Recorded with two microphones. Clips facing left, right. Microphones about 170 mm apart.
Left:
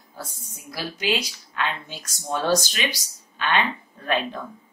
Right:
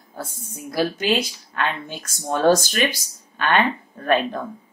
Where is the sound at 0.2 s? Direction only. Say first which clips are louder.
Right 6 dB; 50° right (ahead or behind).